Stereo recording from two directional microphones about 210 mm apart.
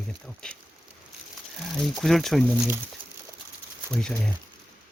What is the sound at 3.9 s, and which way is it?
Speech, 5° left (ahead or behind).